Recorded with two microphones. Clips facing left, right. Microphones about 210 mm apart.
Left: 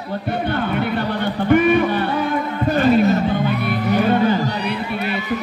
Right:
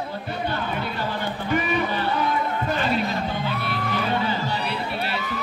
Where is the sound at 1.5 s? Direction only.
60° left (ahead or behind).